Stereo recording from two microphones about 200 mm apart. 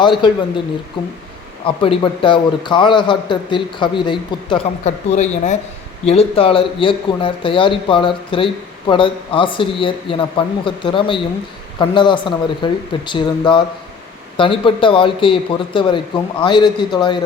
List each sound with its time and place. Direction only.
0.0 s a man's voice: 25° left (ahead or behind)